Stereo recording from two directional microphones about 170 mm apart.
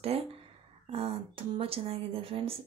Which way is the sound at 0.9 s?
35° right (ahead or behind).